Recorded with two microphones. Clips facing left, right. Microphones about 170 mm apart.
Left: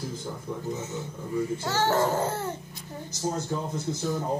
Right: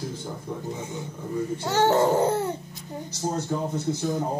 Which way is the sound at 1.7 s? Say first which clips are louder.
Right 6 dB; 15° right (ahead or behind).